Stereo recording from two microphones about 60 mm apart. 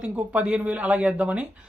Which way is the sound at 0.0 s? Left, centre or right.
Centre.